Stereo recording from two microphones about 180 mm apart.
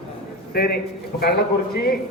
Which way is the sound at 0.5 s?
55° left (ahead or behind).